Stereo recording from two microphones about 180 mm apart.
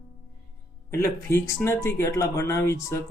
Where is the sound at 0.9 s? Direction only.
15° left (ahead or behind).